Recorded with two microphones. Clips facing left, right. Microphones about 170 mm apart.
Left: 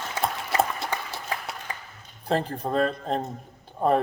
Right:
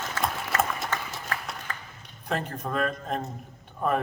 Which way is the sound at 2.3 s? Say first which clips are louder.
Left 5 dB; 30° left (ahead or behind).